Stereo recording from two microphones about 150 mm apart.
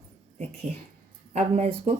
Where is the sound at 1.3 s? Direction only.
45° right (ahead or behind).